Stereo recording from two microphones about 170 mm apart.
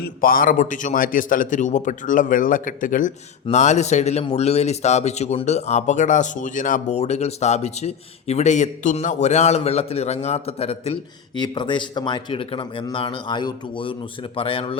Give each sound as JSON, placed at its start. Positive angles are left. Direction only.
{"t": 0.0, "sound": "a man's voice", "side_deg": 55}
{"t": 11.3, "sound": "speech", "side_deg": 25}